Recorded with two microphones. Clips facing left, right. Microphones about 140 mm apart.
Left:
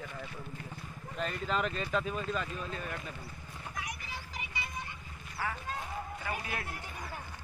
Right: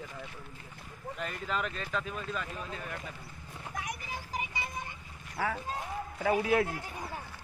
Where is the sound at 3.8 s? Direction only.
50° right (ahead or behind).